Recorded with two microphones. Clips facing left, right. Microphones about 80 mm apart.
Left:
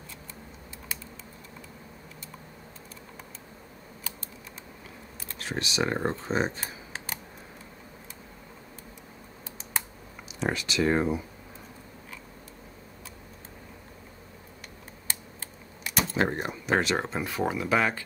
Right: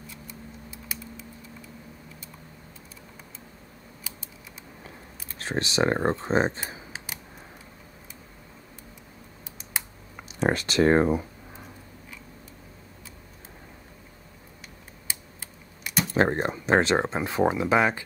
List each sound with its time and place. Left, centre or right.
5.4 s speech: right
10.4 s speech: right
15.0 s typing: centre
16.2 s speech: right; by 18.0 s centre